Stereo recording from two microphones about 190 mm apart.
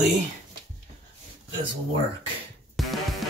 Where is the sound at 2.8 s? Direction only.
Centre (ahead or behind).